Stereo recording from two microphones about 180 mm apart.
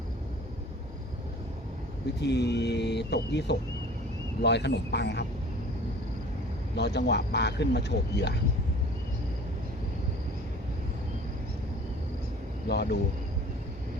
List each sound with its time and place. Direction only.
2.2 s speech: 70° left (ahead or behind)
6.7 s speech: 70° left (ahead or behind)
12.6 s speech: 65° left (ahead or behind)